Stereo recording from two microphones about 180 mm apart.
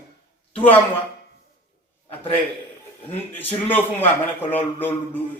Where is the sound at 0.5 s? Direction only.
10° left (ahead or behind).